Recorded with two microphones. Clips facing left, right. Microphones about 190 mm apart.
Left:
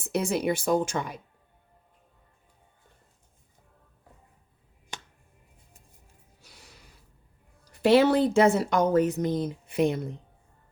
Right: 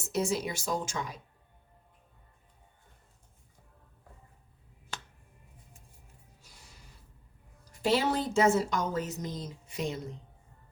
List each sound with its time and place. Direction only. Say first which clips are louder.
0.0 s speech: left 4 dB; 60° left (ahead or behind)
6.4 s snort: left 6 dB; 70° left (ahead or behind)
7.7 s speech: left 8 dB; 65° left (ahead or behind)